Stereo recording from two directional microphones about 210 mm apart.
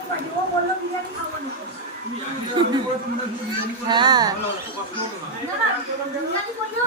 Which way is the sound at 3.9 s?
20° right (ahead or behind).